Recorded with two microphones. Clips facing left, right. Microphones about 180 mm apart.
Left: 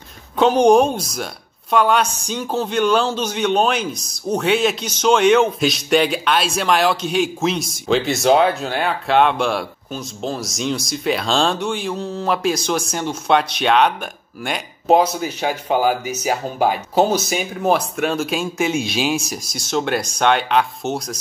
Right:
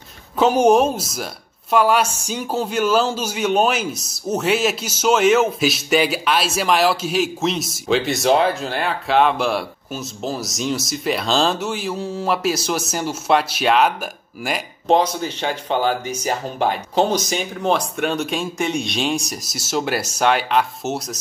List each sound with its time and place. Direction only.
0.4 s speech: 5° right (ahead or behind)
14.9 s speech: 10° left (ahead or behind)